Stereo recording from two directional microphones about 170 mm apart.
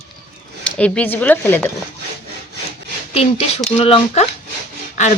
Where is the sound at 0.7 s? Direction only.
5° left (ahead or behind).